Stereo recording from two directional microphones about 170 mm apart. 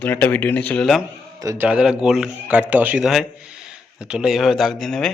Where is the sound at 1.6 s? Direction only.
5° right (ahead or behind).